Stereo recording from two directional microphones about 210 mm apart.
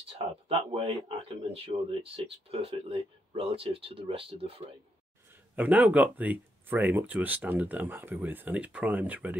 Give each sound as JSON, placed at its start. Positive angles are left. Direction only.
{"t": 0.5, "sound": "speech", "side_deg": -25}
{"t": 5.6, "sound": "speech", "side_deg": -5}